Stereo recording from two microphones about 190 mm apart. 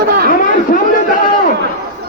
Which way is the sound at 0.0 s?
55° right (ahead or behind).